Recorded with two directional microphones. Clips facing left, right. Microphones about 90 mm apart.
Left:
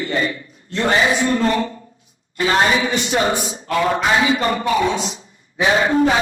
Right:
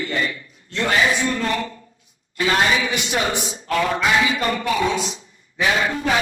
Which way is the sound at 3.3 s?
20° left (ahead or behind).